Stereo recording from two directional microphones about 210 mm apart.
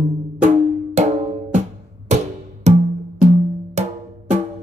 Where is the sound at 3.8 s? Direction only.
30° right (ahead or behind).